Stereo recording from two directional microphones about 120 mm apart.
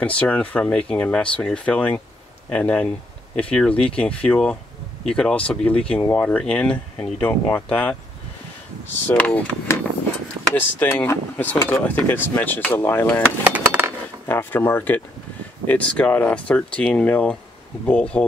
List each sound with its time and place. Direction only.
0.0 s speech: 10° left (ahead or behind)
13.5 s a sound: 15° right (ahead or behind)
14.2 s speech: 15° left (ahead or behind)